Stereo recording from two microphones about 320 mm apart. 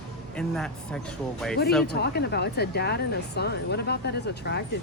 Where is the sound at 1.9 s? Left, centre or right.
Left.